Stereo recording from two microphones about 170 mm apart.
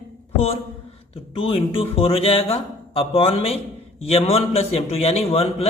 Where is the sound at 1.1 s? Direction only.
35° left (ahead or behind).